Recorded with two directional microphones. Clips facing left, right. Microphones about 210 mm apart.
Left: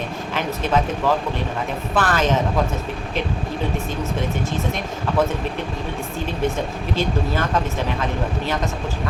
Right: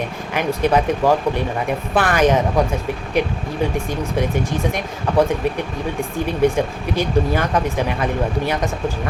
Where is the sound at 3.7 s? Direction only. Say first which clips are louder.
Right 3 dB; 15° right (ahead or behind).